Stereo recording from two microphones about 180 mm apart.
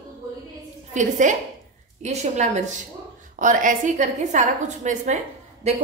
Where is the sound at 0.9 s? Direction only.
45° right (ahead or behind).